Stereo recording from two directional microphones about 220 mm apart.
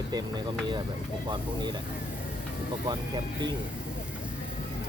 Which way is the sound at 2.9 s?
20° right (ahead or behind).